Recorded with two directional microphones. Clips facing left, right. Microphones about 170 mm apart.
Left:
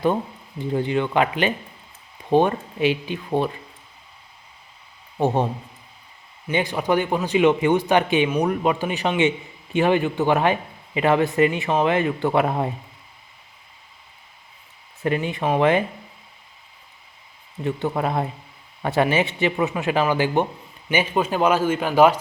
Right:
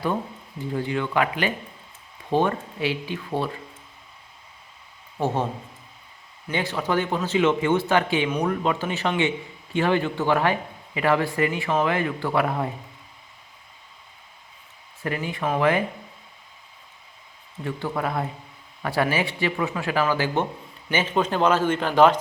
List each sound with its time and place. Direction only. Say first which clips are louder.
0.8 s speech: left 3 dB; 20° left (ahead or behind)
5.1 s speech: left 4 dB; 15° left (ahead or behind)
6.5 s speech: left 4 dB; 15° left (ahead or behind)
15.0 s speech: left 4 dB; 20° left (ahead or behind)
17.6 s speech: left 4 dB; 20° left (ahead or behind)